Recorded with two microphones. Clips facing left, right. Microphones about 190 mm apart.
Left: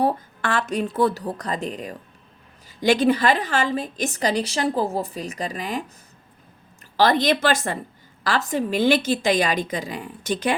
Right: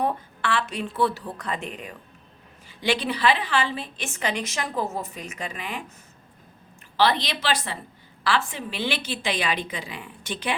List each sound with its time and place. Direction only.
0.0 s a woman's voice: 40° left (ahead or behind)
6.9 s a woman's voice: 45° left (ahead or behind)